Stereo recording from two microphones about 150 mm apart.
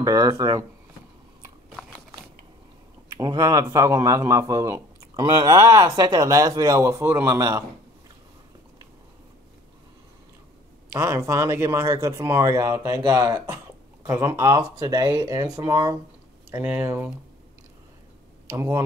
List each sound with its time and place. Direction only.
0.0 s a man's voice: 25° right (ahead or behind)
3.2 s a man's voice: 25° right (ahead or behind)
11.0 s a man's voice: 20° right (ahead or behind)
16.4 s speech: 15° right (ahead or behind)
18.5 s speech: 15° right (ahead or behind)